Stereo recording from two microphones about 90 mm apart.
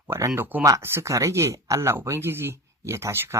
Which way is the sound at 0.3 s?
20° right (ahead or behind).